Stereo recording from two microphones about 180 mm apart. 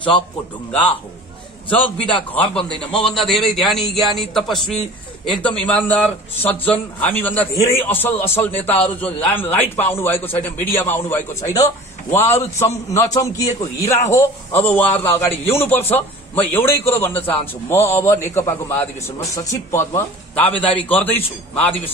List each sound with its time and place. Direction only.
2.9 s a man's voice: 30° left (ahead or behind)
3.2 s a man's voice: centre (ahead or behind)
20.5 s a man's voice: 30° left (ahead or behind)
20.9 s a man's voice: 10° left (ahead or behind)